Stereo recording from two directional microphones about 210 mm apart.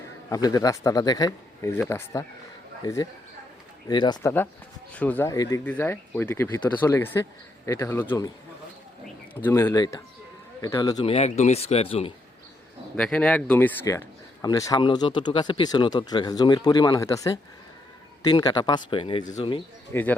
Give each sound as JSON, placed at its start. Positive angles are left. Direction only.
{"t": 0.3, "sound": "speech", "side_deg": 15}
{"t": 9.3, "sound": "speech", "side_deg": 10}
{"t": 13.0, "sound": "speech", "side_deg": 5}
{"t": 19.2, "sound": "speech", "side_deg": 35}
{"t": 19.9, "sound": "speech", "side_deg": 10}